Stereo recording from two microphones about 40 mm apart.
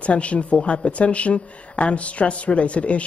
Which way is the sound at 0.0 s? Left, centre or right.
Left.